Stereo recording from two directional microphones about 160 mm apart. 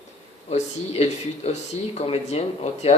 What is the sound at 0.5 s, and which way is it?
Speech, 45° left (ahead or behind).